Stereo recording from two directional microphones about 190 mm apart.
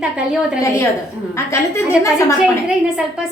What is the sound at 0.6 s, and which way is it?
A woman's voice, 15° left (ahead or behind).